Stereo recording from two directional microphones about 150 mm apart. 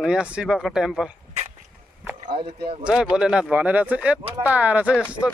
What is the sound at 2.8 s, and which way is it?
Speech, 5° right (ahead or behind).